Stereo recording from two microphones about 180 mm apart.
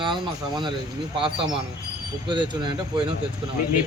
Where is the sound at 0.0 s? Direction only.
25° right (ahead or behind).